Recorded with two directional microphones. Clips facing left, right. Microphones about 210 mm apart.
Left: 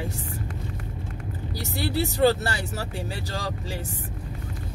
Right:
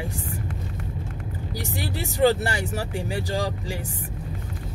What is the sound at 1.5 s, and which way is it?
Speech, 15° right (ahead or behind).